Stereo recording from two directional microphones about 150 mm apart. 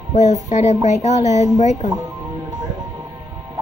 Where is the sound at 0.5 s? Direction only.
45° left (ahead or behind).